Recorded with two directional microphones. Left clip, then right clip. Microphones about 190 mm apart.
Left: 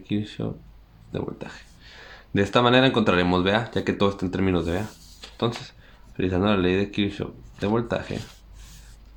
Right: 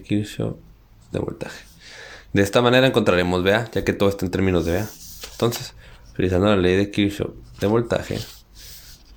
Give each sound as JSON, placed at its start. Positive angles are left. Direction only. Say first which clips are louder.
{"t": 0.0, "sound": "speech", "louder": "right 5 dB", "side_deg": -30}